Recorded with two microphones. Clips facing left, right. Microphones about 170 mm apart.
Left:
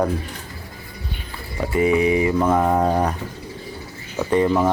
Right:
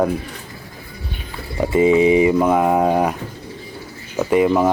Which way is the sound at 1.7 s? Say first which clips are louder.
Right 4 dB; 20° right (ahead or behind).